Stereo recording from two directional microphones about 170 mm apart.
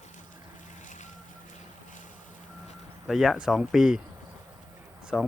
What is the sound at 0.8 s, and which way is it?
Vehicle, 45° left (ahead or behind).